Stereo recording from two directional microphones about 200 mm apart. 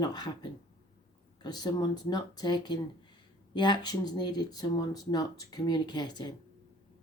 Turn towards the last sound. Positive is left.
turn(degrees=20)  # may be behind; listen again after turning